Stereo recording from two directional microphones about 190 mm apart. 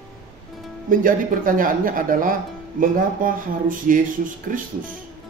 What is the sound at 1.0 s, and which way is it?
Speech, 45° right (ahead or behind).